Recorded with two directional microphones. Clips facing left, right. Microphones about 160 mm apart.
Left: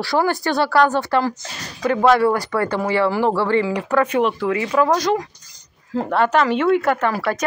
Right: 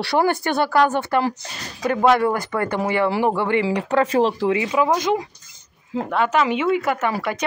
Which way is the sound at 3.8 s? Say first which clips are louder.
Even; 30° right (ahead or behind).